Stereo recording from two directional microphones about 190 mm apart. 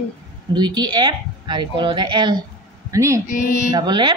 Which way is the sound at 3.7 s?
25° right (ahead or behind).